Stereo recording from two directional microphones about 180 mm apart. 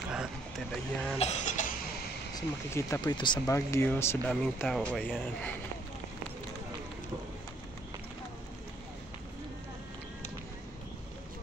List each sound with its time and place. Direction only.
0.1 s a sound: 5° right (ahead or behind)
1.1 s cough: 40° left (ahead or behind)
2.3 s speech: 20° left (ahead or behind)